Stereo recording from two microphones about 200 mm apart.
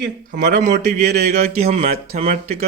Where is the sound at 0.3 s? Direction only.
60° right (ahead or behind).